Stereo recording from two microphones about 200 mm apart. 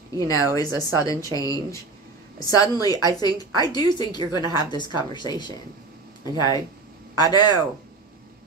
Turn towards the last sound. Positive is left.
turn(degrees=20)  # may be behind; listen again after turning